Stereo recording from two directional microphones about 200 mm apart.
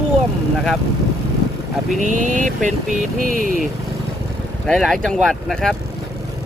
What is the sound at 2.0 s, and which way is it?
Speech, 40° right (ahead or behind).